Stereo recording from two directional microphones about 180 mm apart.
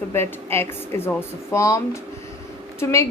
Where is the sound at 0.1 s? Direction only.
15° left (ahead or behind).